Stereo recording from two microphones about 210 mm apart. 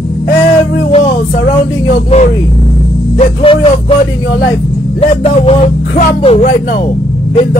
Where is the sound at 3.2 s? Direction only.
25° left (ahead or behind).